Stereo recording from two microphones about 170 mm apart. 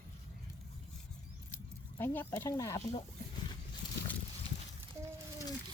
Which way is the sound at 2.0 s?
15° left (ahead or behind).